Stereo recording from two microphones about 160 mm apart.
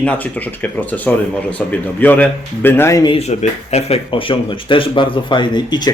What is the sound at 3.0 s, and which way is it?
Speech, 30° left (ahead or behind).